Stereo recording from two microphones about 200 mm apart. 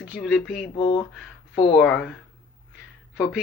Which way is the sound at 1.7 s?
5° left (ahead or behind).